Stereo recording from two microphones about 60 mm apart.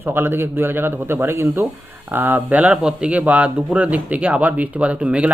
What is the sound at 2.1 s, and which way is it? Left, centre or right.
A man's voice, right.